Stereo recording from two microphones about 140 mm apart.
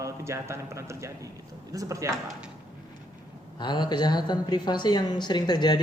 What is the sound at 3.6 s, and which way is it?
Speech, 30° left (ahead or behind).